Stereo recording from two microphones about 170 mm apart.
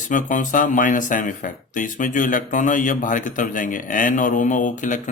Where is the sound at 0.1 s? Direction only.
50° left (ahead or behind).